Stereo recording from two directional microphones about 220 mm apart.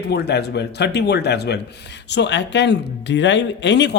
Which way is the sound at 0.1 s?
50° left (ahead or behind).